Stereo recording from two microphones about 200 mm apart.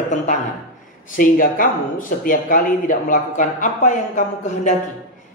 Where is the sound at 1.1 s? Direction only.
45° left (ahead or behind).